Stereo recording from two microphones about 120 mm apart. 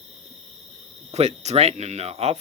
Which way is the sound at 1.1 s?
65° right (ahead or behind).